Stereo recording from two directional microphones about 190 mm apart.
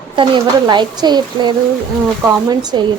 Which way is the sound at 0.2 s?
25° right (ahead or behind).